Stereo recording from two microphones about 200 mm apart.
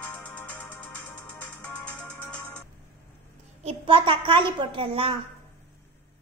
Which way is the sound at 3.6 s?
25° right (ahead or behind).